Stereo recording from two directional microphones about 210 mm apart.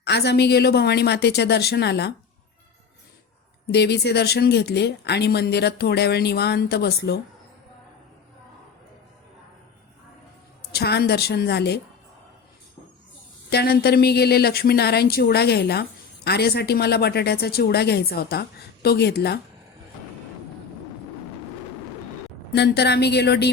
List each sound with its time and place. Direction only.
0.0 s speech: 50° left (ahead or behind)
3.7 s speech: 50° left (ahead or behind)
10.7 s speech: 50° left (ahead or behind)
13.5 s speech: 50° left (ahead or behind)
22.5 s speech: 50° left (ahead or behind)